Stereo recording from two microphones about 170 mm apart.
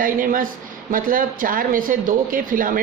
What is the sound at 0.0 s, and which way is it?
Speech, 55° right (ahead or behind).